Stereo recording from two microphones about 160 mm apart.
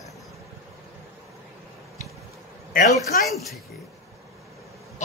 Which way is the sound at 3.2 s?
Centre (ahead or behind).